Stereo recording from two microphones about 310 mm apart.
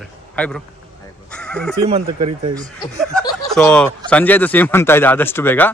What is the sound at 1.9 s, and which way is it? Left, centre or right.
Speech, centre.